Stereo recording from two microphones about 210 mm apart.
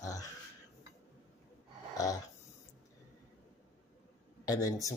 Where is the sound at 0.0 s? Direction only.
15° left (ahead or behind).